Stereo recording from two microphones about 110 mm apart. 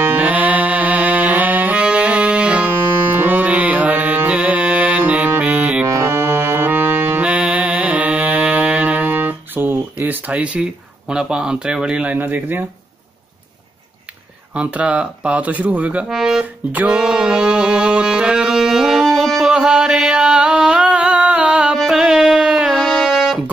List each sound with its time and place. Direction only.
0.0 s music: 15° right (ahead or behind)
5.9 s music: 25° right (ahead or behind)
14.5 s speech: 10° right (ahead or behind)
19.5 s mantra: 10° right (ahead or behind)
21.7 s music: centre (ahead or behind)